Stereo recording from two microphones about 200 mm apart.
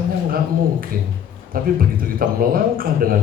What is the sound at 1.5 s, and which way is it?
Speech, 45° right (ahead or behind).